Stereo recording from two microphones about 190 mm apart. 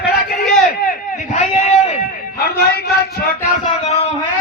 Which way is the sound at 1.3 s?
35° left (ahead or behind).